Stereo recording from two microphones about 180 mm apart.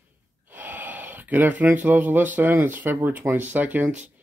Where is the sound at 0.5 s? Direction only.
10° right (ahead or behind).